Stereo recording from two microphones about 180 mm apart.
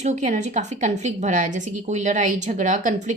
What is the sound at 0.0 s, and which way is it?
A woman's voice, 40° right (ahead or behind).